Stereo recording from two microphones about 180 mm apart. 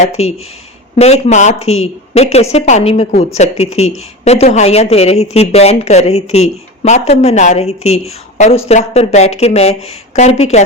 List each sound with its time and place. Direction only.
0.2 s speech: 35° left (ahead or behind)